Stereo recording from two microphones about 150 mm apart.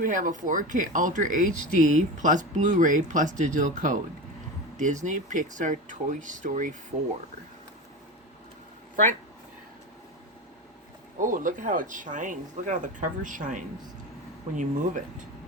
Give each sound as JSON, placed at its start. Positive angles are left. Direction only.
{"t": 0.0, "sound": "speech", "side_deg": -60}
{"t": 11.2, "sound": "speech", "side_deg": -60}